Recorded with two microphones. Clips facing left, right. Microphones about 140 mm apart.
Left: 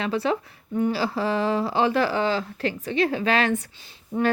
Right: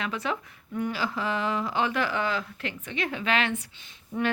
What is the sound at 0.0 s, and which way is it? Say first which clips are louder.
Speech: left 7 dB; 35° left (ahead or behind).